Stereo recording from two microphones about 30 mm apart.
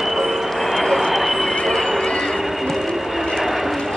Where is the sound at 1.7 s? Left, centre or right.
Centre.